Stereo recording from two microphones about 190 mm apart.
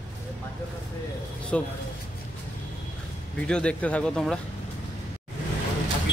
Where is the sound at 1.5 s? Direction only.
5° left (ahead or behind).